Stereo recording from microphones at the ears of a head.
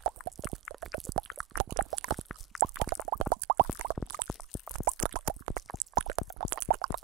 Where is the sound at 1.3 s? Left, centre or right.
Right.